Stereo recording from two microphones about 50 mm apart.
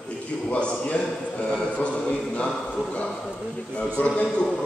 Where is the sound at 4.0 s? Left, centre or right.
Left.